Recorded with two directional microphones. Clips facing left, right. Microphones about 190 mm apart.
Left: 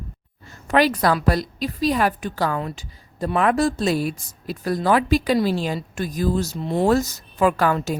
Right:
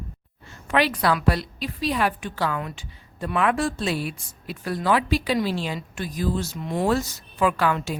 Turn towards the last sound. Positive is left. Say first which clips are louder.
# left 3 dB
turn(degrees=40)  # may be behind; listen again after turning